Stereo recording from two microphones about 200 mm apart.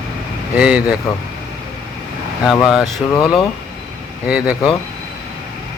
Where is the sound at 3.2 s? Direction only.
25° left (ahead or behind).